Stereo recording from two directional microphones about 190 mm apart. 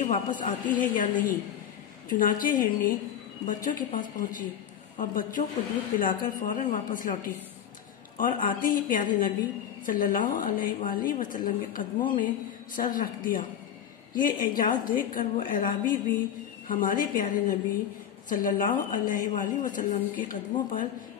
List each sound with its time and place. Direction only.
0.0 s a woman's voice: 40° left (ahead or behind)
8.2 s a woman's voice: 45° left (ahead or behind)